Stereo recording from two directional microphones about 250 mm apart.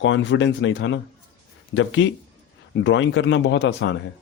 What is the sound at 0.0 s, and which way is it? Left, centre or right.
A man's voice, left.